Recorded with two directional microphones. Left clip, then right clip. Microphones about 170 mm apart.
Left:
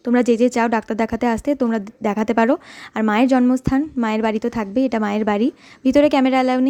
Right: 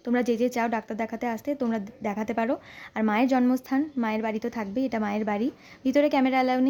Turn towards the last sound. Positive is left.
turn(degrees=25)  # may be behind; listen again after turning